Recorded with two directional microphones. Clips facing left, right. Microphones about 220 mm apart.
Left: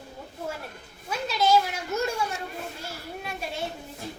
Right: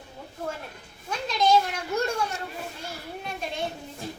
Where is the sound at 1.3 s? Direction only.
5° left (ahead or behind).